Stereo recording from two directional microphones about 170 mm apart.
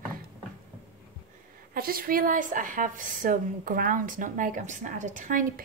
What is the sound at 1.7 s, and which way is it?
A woman's voice, 60° right (ahead or behind).